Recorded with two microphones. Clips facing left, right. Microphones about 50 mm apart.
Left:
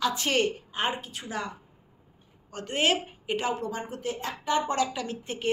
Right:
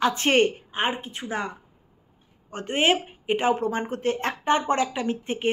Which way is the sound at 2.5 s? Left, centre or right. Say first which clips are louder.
Right 4 dB; right.